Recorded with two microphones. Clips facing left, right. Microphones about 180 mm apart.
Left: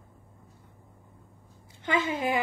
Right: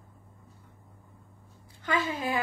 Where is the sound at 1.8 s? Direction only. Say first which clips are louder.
Left 2 dB; 20° left (ahead or behind).